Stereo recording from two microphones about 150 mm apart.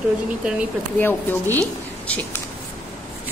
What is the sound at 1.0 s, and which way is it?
Speech, 15° left (ahead or behind).